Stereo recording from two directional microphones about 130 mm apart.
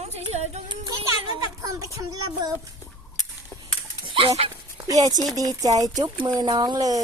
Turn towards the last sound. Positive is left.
turn(degrees=-30)  # may be behind; listen again after turning